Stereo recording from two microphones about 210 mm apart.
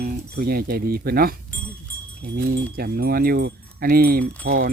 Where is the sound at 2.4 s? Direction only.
45° right (ahead or behind).